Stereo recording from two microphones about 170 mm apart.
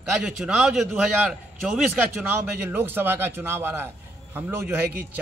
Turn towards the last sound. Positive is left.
turn(degrees=-15)  # may be behind; listen again after turning